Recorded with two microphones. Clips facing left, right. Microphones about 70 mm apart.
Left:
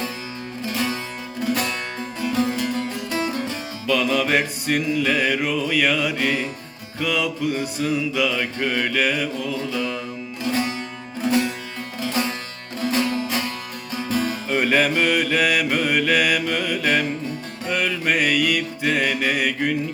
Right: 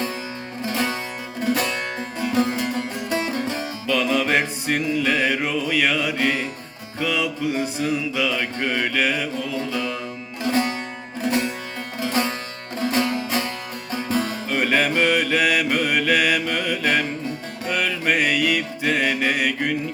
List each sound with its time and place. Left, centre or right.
0.7 s music: right
2.2 s music: right
3.8 s music: centre
10.4 s music: right
14.1 s music: right
14.5 s mantra: centre
17.7 s music: centre